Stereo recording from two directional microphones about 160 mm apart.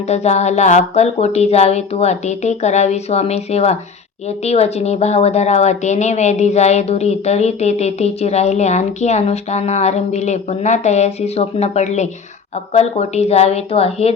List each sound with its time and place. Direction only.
0.1 s a woman's voice: 45° left (ahead or behind)